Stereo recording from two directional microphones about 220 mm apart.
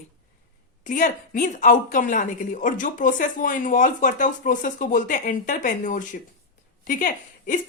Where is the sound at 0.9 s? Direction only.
35° left (ahead or behind).